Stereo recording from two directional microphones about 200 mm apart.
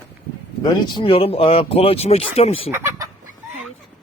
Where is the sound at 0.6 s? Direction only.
25° left (ahead or behind).